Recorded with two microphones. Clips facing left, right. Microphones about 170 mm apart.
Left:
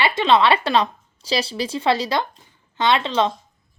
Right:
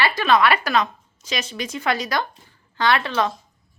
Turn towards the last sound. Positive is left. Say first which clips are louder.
# left 2 dB
turn(degrees=20)  # may be behind; listen again after turning